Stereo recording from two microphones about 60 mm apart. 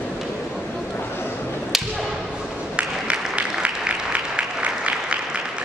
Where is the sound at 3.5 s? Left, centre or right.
Centre.